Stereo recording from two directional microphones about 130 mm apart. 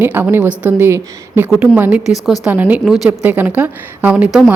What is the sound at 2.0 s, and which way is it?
Speech, 5° right (ahead or behind).